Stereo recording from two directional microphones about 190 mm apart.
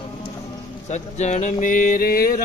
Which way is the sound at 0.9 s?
35° left (ahead or behind).